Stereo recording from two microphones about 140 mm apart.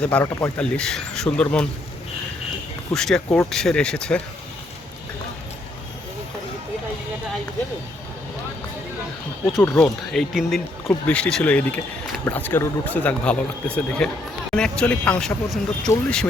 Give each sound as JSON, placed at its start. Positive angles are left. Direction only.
{"t": 0.0, "sound": "speech", "side_deg": 10}
{"t": 2.9, "sound": "speech", "side_deg": 5}
{"t": 9.6, "sound": "speech", "side_deg": 15}
{"t": 10.1, "sound": "speech", "side_deg": 0}